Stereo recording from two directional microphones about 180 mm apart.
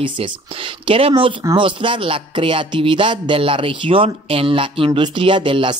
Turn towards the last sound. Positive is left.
turn(degrees=-25)  # may be behind; listen again after turning